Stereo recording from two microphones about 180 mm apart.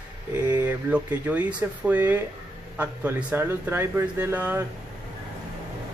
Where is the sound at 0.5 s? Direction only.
10° right (ahead or behind).